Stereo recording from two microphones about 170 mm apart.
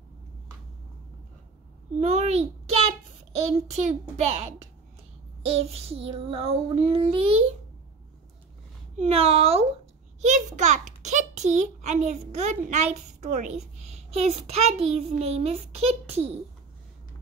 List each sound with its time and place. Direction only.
2.0 s a child's voice: 40° right (ahead or behind)
8.9 s a child's voice: 35° right (ahead or behind)